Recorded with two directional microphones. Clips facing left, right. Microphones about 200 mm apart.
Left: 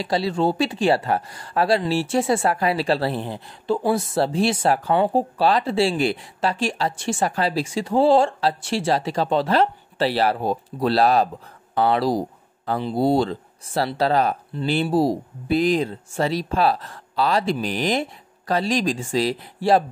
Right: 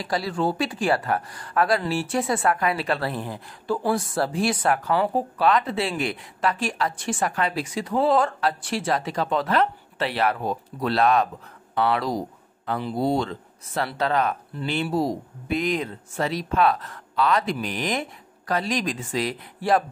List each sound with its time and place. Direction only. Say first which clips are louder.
0.0 s speech: left 4 dB; 25° left (ahead or behind)